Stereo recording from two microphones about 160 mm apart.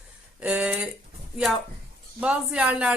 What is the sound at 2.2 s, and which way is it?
Speech, 5° right (ahead or behind).